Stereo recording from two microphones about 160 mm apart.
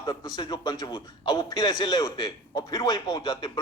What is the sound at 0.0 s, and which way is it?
A man's voice, 25° left (ahead or behind).